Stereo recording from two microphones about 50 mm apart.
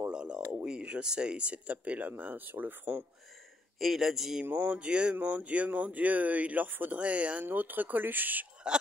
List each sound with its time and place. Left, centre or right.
0.1 s a sound: centre
0.7 s speech: right
3.8 s speech: centre
4.5 s speech: right
7.4 s speech: right